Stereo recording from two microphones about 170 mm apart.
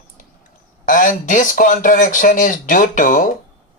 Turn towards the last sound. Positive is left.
turn(degrees=50)  # may be behind; listen again after turning